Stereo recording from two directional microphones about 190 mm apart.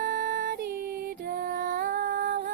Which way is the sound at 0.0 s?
45° right (ahead or behind).